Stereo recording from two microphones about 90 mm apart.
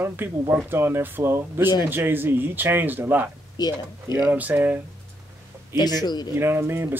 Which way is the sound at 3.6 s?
50° left (ahead or behind).